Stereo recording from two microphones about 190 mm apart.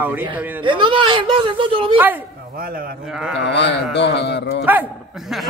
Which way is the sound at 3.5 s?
65° left (ahead or behind).